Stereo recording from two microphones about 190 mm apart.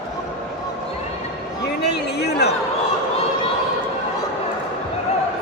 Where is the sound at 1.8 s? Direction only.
60° left (ahead or behind).